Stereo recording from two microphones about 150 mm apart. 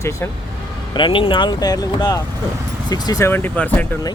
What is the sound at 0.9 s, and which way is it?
Speech, 35° left (ahead or behind).